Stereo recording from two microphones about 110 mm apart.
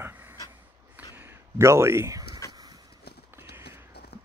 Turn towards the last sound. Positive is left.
turn(degrees=-20)  # may be behind; listen again after turning